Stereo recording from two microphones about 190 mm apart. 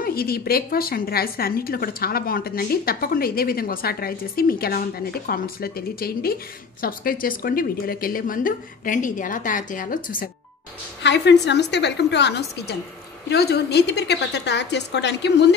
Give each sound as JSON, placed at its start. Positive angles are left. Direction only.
{"t": 0.0, "sound": "a woman's voice", "side_deg": 55}
{"t": 11.0, "sound": "a woman's voice", "side_deg": 65}